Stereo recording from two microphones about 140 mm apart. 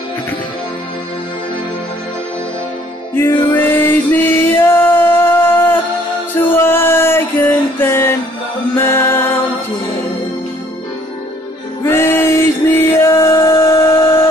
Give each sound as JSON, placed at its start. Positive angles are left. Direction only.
{"t": 3.2, "sound": "music", "side_deg": 15}
{"t": 11.8, "sound": "music", "side_deg": 20}